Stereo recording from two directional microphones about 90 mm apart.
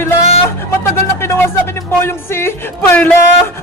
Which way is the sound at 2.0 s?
30° left (ahead or behind).